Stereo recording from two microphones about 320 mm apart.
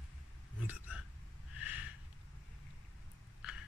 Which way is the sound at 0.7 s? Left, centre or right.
Centre.